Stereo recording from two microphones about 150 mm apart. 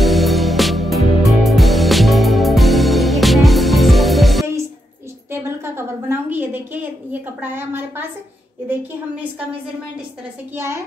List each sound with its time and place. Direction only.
0.0 s music: centre (ahead or behind)
5.3 s a sound: 15° right (ahead or behind)
10.5 s a woman's voice: 15° right (ahead or behind)